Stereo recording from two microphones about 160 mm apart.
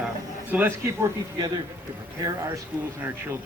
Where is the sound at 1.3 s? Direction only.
25° right (ahead or behind).